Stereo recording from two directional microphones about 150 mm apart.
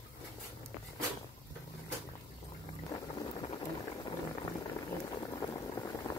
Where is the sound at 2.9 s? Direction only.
30° left (ahead or behind).